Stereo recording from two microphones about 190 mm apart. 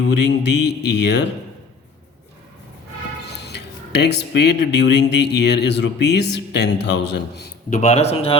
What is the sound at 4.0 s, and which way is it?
Speech, 60° left (ahead or behind).